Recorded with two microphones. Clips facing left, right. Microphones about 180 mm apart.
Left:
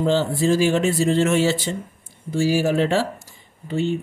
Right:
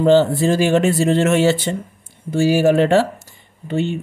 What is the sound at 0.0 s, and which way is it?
Speech, 60° right (ahead or behind).